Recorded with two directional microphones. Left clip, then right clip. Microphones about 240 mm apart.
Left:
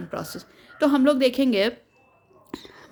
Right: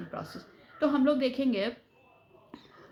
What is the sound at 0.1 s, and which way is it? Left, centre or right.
A woman's voice, left.